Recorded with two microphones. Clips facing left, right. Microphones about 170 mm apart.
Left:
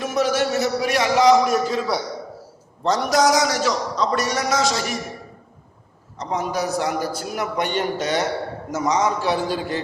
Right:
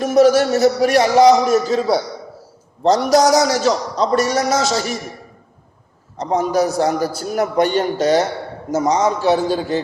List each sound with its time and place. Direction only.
0.0 s a man's voice: 40° right (ahead or behind)
6.1 s a man's voice: 40° right (ahead or behind)
9.2 s a man's voice: 25° right (ahead or behind)